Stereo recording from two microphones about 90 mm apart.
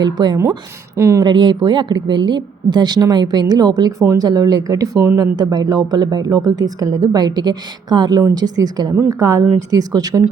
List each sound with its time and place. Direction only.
0.0 s speech: 50° right (ahead or behind)
0.9 s speech: 35° right (ahead or behind)
1.2 s a woman's voice: 55° right (ahead or behind)